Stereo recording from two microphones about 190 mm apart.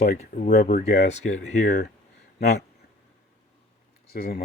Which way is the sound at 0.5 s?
55° left (ahead or behind).